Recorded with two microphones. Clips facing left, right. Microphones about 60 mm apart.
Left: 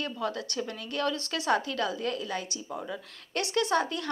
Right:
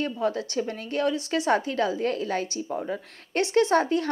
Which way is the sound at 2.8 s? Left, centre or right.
Right.